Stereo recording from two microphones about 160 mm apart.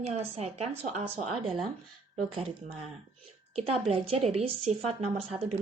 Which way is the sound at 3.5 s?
35° right (ahead or behind).